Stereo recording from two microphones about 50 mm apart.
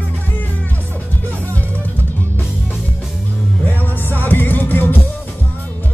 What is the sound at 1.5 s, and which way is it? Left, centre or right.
Music, left.